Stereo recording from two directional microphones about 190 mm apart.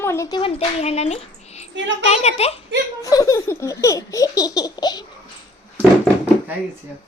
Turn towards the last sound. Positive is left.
turn(degrees=-10)  # may be behind; listen again after turning